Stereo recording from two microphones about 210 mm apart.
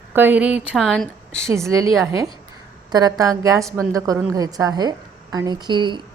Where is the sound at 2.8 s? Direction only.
20° right (ahead or behind).